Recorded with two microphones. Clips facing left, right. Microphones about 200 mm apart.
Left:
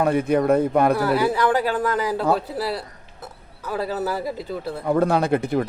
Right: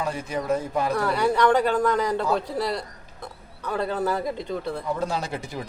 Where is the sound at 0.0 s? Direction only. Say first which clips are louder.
Left 10 dB; 60° left (ahead or behind).